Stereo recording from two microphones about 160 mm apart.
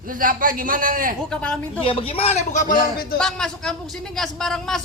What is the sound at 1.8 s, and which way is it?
Speech, 35° left (ahead or behind).